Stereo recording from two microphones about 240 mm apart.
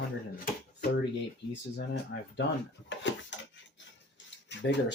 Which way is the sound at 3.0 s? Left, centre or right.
Left.